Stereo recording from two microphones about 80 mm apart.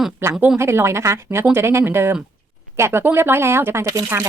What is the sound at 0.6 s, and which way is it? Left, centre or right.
Speech, right.